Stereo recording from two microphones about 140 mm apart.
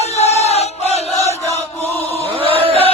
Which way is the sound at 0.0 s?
50° left (ahead or behind).